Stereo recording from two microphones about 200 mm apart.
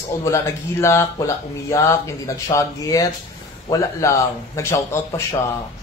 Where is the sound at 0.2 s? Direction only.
15° left (ahead or behind).